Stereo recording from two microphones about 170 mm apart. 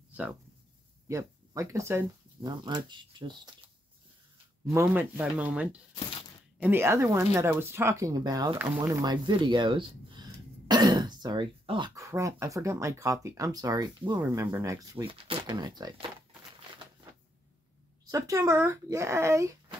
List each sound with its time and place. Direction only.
0.1 s a sound: 10° right (ahead or behind)
1.0 s speech: 20° right (ahead or behind)
2.5 s speech: 25° right (ahead or behind)
4.8 s speech: 10° right (ahead or behind); by 11.9 s 30° right (ahead or behind)
11.9 s speech: 20° right (ahead or behind)
15.0 s speech: 30° right (ahead or behind)
18.0 s speech: 20° right (ahead or behind)